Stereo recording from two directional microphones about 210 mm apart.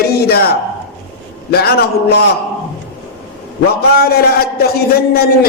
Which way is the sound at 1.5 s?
50° left (ahead or behind).